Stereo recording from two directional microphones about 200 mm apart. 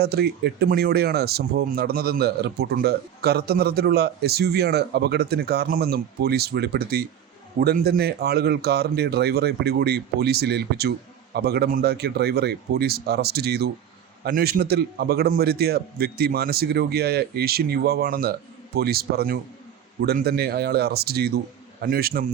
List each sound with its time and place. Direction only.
0.0 s speech: 50° right (ahead or behind)